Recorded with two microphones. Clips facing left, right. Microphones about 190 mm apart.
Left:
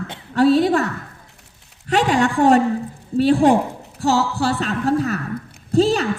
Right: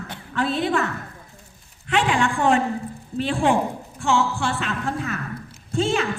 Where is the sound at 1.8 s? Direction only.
40° left (ahead or behind).